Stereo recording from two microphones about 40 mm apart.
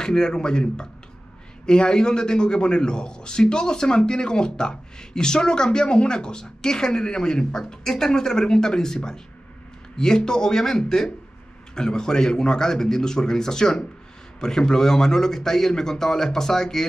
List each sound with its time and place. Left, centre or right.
0.0 s a man's voice: centre